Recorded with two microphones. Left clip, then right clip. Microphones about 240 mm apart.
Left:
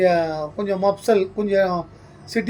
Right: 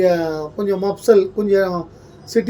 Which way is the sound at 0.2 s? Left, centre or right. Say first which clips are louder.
Even; centre.